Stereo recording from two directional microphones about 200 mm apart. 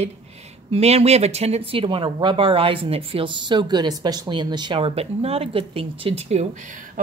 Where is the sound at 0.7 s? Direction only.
30° right (ahead or behind).